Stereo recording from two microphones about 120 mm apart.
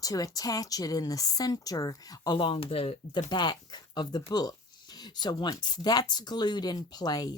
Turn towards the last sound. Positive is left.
turn(degrees=35)  # may be behind; listen again after turning